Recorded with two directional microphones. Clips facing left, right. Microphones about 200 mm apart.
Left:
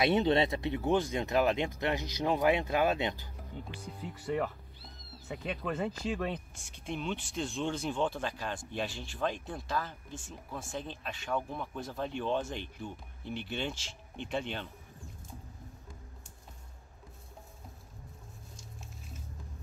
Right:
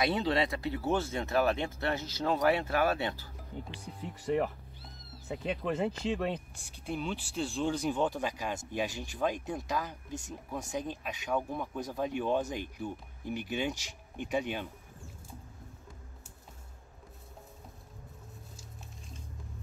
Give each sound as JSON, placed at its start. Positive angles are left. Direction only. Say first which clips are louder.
{"t": 0.0, "sound": "speech", "louder": "left 3 dB", "side_deg": 25}
{"t": 5.3, "sound": "speech", "louder": "right 3 dB", "side_deg": -30}
{"t": 5.6, "sound": "speech", "louder": "right 2 dB", "side_deg": -20}
{"t": 6.9, "sound": "speech", "louder": "right 1 dB", "side_deg": -5}